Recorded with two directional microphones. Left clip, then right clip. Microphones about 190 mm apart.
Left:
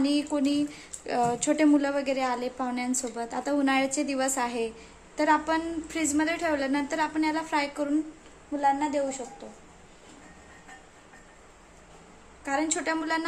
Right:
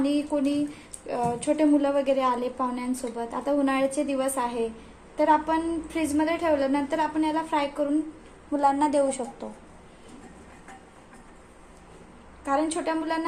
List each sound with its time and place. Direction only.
0.0 s a woman's voice: 20° left (ahead or behind)
8.5 s a woman's voice: 10° right (ahead or behind)
12.5 s a woman's voice: 10° left (ahead or behind)